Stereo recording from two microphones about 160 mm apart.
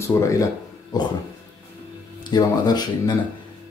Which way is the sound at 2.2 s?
25° left (ahead or behind).